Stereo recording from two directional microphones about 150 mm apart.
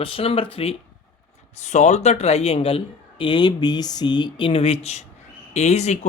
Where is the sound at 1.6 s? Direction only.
50° left (ahead or behind).